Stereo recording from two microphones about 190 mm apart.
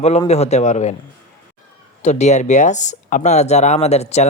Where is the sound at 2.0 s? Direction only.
35° left (ahead or behind).